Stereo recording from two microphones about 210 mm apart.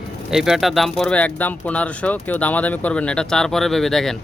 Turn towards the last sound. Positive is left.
turn(degrees=0)  # may be behind; listen again after turning